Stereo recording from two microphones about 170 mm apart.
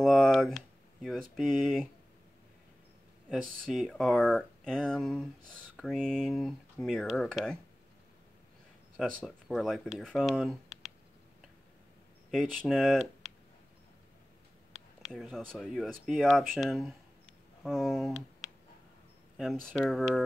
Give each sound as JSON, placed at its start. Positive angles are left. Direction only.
{"t": 0.0, "sound": "speech", "side_deg": 0}
{"t": 3.3, "sound": "speech", "side_deg": 0}
{"t": 9.2, "sound": "speech", "side_deg": 0}
{"t": 12.3, "sound": "speech", "side_deg": 0}
{"t": 15.0, "sound": "a sound", "side_deg": 0}
{"t": 15.3, "sound": "speech", "side_deg": 5}
{"t": 19.6, "sound": "speech", "side_deg": 0}